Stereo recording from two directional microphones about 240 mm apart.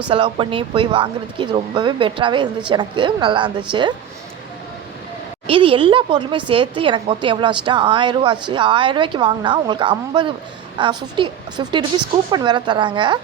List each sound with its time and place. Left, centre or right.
0.1 s speech: right
5.5 s speech: right